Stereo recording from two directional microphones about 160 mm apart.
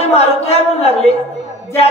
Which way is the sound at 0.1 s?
40° left (ahead or behind).